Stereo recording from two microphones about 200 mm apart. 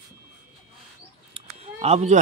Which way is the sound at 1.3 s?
30° right (ahead or behind).